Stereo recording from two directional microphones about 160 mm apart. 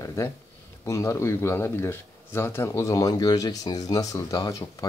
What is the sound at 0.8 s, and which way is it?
Speech, 20° left (ahead or behind).